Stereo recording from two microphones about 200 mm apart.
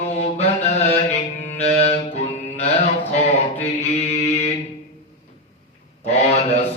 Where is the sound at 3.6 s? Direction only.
30° left (ahead or behind).